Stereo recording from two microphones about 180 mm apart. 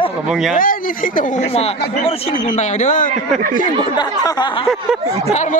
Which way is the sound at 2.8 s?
45° left (ahead or behind).